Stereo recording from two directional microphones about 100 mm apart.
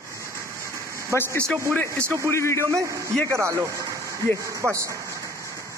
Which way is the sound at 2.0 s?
30° right (ahead or behind).